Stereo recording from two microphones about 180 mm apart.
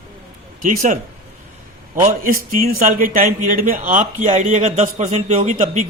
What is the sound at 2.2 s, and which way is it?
A man's voice, 50° right (ahead or behind).